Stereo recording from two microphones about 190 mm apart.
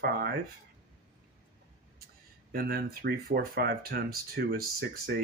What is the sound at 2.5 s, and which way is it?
Speech, 55° right (ahead or behind).